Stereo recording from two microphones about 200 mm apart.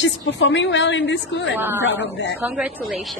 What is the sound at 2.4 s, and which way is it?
Speech, 5° right (ahead or behind).